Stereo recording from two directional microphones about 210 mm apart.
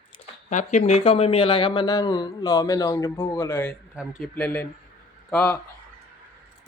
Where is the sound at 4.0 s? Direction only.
Centre (ahead or behind).